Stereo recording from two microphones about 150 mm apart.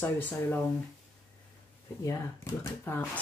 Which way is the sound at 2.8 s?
15° left (ahead or behind).